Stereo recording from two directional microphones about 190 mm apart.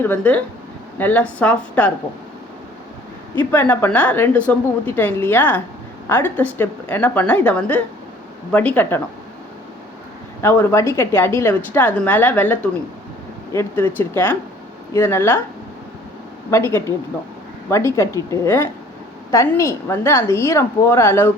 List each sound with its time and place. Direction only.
0.0 s a woman's voice: 10° left (ahead or behind)
3.5 s a woman's voice: 10° left (ahead or behind)
10.4 s a woman's voice: 10° left (ahead or behind)
16.5 s a woman's voice: 15° left (ahead or behind)